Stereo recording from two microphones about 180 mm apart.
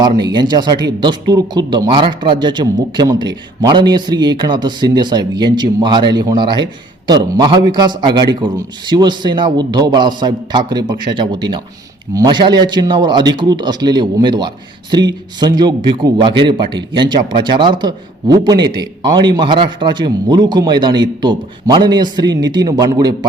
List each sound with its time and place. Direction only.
0.2 s a man's voice: 25° right (ahead or behind)